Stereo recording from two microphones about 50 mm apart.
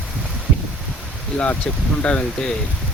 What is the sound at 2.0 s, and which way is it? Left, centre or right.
Speech, left.